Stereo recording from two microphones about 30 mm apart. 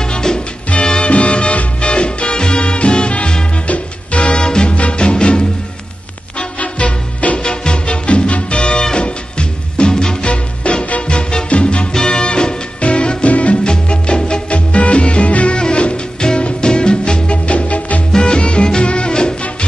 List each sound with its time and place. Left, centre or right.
0.0 s music: left
0.7 s music: left
3.6 s music: left
4.4 s music: left
4.6 s music: left
6.8 s music: left
7.3 s music: left
8.7 s music: left
13.3 s music: left
13.7 s music: left
17.5 s music: left
18.1 s music: left